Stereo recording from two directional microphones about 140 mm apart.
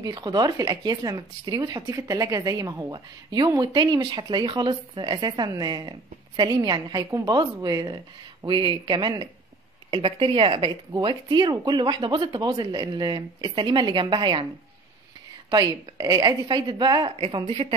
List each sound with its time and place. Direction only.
0.0 s speech: 30° right (ahead or behind)
15.5 s speech: 25° right (ahead or behind)